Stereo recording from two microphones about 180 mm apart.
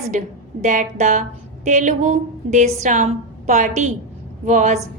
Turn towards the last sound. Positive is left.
turn(degrees=-40)  # may be behind; listen again after turning